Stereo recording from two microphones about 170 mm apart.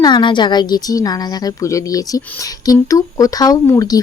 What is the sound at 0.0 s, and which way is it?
Speech, 25° left (ahead or behind).